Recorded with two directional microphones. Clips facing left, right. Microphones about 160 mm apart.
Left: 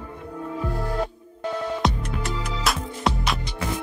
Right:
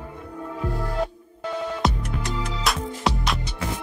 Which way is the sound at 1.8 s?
5° right (ahead or behind).